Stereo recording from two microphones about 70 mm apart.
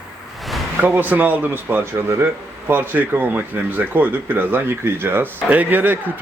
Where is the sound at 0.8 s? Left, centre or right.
Right.